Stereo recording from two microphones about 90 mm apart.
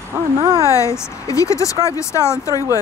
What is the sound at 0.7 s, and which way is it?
Speech, 35° left (ahead or behind).